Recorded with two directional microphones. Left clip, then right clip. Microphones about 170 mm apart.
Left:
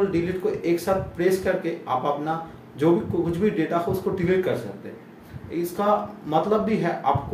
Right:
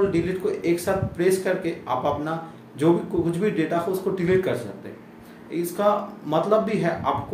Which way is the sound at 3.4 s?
20° right (ahead or behind).